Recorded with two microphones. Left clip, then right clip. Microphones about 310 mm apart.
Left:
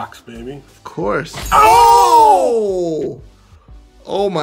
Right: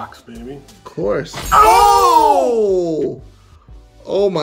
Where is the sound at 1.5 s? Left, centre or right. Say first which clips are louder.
Even; left.